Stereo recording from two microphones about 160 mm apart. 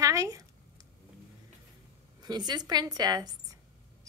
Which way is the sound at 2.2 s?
25° right (ahead or behind).